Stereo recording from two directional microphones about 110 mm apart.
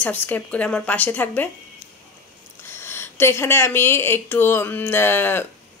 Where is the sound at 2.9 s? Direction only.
25° left (ahead or behind).